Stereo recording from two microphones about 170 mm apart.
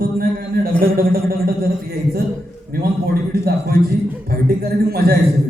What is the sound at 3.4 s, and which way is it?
A man's voice, 65° right (ahead or behind).